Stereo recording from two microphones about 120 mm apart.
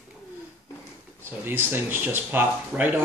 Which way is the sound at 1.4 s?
15° right (ahead or behind).